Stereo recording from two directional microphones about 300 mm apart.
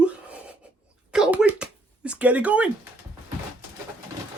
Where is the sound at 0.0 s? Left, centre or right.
Centre.